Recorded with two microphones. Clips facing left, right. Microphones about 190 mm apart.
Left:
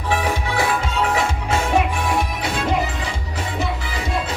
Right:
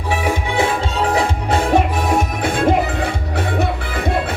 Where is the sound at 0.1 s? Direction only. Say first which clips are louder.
Right 2 dB; 20° right (ahead or behind).